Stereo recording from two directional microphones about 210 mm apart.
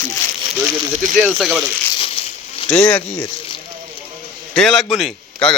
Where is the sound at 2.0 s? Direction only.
30° left (ahead or behind).